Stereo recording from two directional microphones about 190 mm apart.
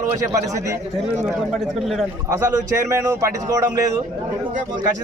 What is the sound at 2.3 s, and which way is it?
Speech, 15° right (ahead or behind).